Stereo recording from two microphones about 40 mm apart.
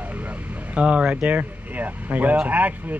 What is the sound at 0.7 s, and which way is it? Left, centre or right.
Speech, right.